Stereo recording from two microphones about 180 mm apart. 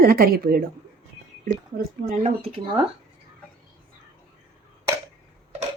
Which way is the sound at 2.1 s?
40° right (ahead or behind).